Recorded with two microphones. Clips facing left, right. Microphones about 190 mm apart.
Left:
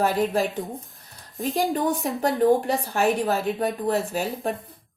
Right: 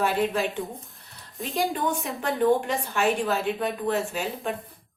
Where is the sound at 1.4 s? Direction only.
Centre (ahead or behind).